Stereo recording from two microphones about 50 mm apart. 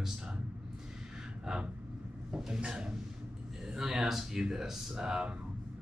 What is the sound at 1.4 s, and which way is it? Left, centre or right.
Vehicle, centre.